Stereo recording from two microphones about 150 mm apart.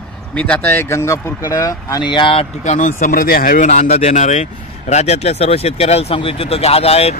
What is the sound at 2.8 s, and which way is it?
Speech, 60° left (ahead or behind).